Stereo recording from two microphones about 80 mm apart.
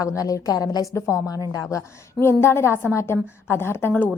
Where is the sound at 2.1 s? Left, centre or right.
Left.